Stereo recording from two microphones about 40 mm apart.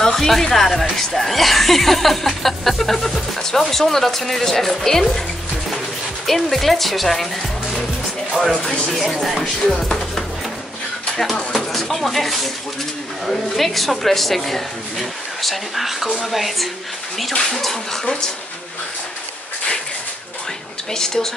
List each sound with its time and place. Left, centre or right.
0.0 s speech: centre
6.2 s speech: centre
8.5 s speech: centre
9.1 s speech: centre
9.4 s speech: centre
11.5 s speech: centre
20.9 s speech: centre